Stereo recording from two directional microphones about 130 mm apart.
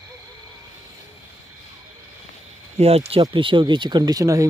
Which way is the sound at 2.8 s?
50° right (ahead or behind).